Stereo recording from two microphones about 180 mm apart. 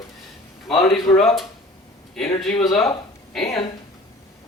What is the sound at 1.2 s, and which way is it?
Speech, centre (ahead or behind).